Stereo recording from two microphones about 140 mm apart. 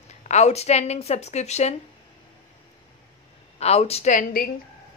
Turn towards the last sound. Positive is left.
turn(degrees=90)